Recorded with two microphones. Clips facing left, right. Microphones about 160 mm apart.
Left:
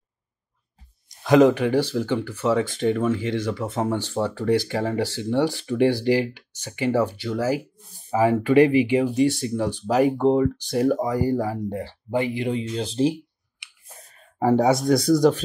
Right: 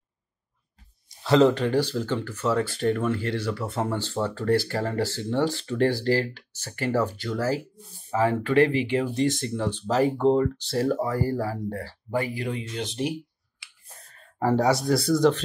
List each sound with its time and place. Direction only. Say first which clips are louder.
1.2 s speech: left 3 dB; 15° left (ahead or behind); by 13.1 s 30° left (ahead or behind)
13.6 s clicking: left 2 dB; 20° left (ahead or behind)
14.4 s speech: left 3 dB; 15° left (ahead or behind)